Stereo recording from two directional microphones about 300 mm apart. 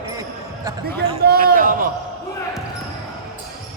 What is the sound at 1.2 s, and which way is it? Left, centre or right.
Speech, right.